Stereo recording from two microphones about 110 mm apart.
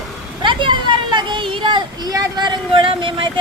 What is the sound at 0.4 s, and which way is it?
Speech, 45° right (ahead or behind).